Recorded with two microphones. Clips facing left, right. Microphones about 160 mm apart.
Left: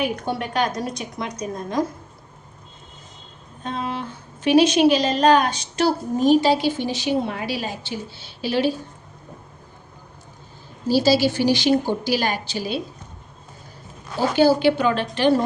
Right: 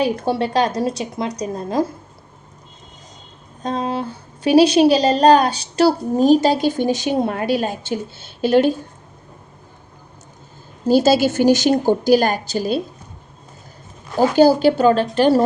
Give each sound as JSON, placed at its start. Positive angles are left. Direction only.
{"t": 0.0, "sound": "a woman's voice", "side_deg": -30}
{"t": 3.6, "sound": "a woman's voice", "side_deg": -40}
{"t": 10.8, "sound": "a woman's voice", "side_deg": -50}
{"t": 14.3, "sound": "a woman's voice", "side_deg": -40}